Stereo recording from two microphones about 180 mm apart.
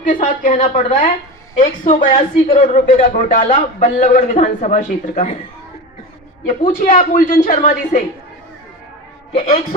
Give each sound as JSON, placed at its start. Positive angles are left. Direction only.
{"t": 0.1, "sound": "a man's voice", "side_deg": 45}
{"t": 2.0, "sound": "a woman's voice", "side_deg": 30}
{"t": 2.7, "sound": "a man's voice", "side_deg": 45}
{"t": 6.4, "sound": "a man's voice", "side_deg": 45}